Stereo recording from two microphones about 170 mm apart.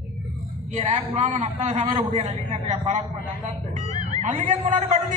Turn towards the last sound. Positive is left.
turn(degrees=-45)  # may be behind; listen again after turning